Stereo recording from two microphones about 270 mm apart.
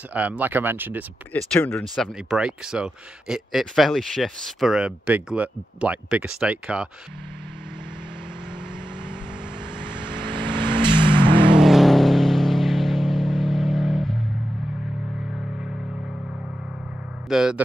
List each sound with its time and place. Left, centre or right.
0.1 s speech: centre
1.3 s speech: centre
9.8 s vehicle: centre
11.5 s vehicle: centre
17.3 s speech: centre